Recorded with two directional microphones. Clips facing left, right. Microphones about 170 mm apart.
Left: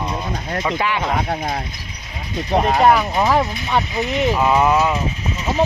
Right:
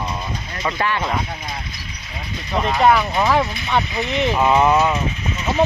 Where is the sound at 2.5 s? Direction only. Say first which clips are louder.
Left 3 dB; 45° left (ahead or behind).